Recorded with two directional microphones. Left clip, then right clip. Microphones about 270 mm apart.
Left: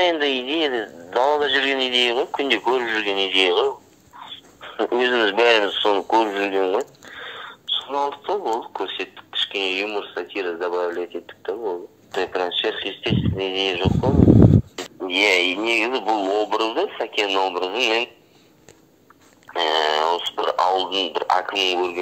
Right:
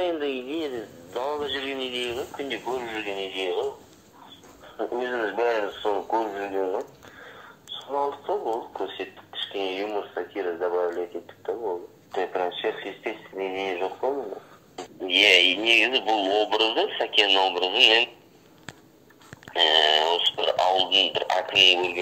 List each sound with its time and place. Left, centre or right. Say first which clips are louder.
0.0 s speech: left 8 dB; left
4.7 s speech: left 9 dB; left
7.9 s speech: even; left
15.0 s speech: even; centre
19.5 s speech: even; centre